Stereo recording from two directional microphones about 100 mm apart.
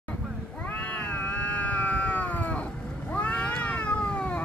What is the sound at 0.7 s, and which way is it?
Cat, 15° left (ahead or behind).